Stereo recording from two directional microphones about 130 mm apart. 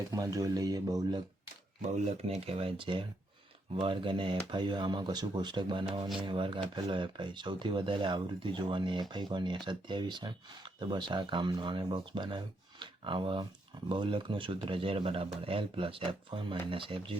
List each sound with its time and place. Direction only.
0.1 s speech: 25° right (ahead or behind)
1.8 s speech: 55° right (ahead or behind)